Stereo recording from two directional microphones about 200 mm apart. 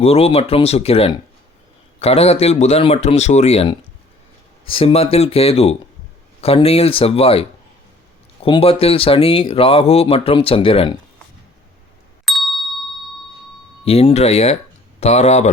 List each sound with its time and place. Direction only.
0.0 s a man's voice: 30° left (ahead or behind)
12.2 s ding: centre (ahead or behind)
13.8 s a man's voice: 30° left (ahead or behind)